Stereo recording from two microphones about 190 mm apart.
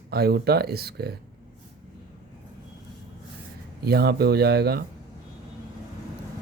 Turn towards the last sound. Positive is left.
turn(degrees=-60)  # may be behind; listen again after turning